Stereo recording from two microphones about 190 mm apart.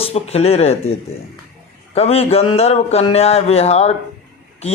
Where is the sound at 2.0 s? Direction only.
30° left (ahead or behind).